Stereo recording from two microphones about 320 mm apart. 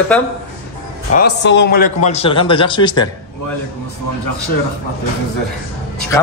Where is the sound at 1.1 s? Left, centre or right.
Left.